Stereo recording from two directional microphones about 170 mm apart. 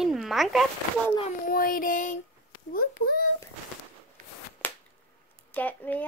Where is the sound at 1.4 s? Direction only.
55° left (ahead or behind).